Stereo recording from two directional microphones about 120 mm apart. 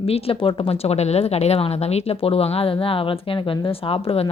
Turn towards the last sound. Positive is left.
turn(degrees=55)  # may be behind; listen again after turning